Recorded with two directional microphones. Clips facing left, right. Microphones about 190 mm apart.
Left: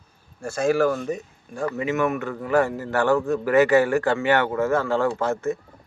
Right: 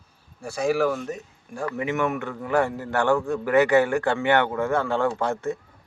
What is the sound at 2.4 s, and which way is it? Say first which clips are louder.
Speech: left 2 dB; 10° right (ahead or behind).